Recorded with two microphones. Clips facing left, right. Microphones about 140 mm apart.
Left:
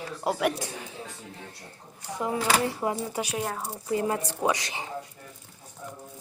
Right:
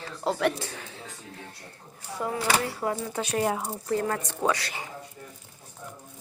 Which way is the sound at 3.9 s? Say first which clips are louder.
Left 1 dB; 15° left (ahead or behind).